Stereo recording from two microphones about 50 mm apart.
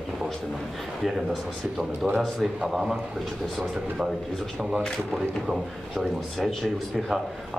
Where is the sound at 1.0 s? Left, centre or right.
Centre.